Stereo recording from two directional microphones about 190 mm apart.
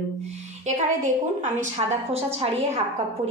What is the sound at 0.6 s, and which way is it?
A woman's voice, 40° right (ahead or behind).